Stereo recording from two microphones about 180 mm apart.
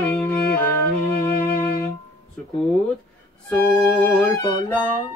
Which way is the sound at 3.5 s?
15° left (ahead or behind).